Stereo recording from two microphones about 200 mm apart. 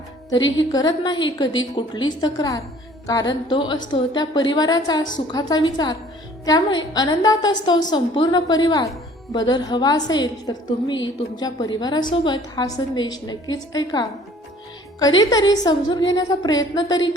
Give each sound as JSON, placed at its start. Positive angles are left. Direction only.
{"t": 0.3, "sound": "a woman's voice", "side_deg": 20}